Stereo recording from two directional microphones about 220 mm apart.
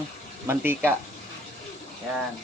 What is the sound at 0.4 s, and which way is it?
Speech, 10° right (ahead or behind).